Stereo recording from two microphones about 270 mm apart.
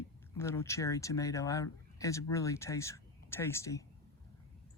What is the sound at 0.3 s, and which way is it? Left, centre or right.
Speech, centre.